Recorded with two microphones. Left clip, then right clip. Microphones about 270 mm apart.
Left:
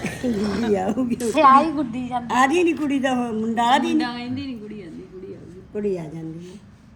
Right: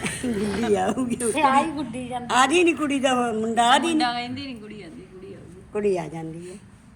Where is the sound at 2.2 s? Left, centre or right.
Centre.